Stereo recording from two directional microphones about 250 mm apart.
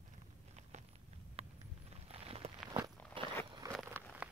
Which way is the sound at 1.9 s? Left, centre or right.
Right.